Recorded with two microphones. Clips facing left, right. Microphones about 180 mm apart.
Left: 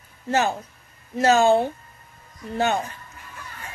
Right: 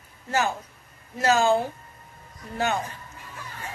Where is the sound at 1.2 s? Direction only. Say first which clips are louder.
Left 4 dB; 30° left (ahead or behind).